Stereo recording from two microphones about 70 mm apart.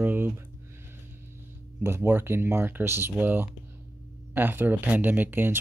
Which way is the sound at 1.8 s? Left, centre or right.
Right.